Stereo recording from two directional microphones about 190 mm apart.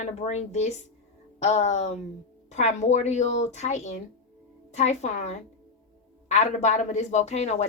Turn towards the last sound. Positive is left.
turn(degrees=35)  # may be behind; listen again after turning